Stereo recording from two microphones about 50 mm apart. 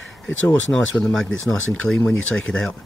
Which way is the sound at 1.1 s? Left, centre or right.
Centre.